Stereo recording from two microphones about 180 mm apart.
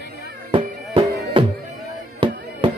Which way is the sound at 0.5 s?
30° right (ahead or behind).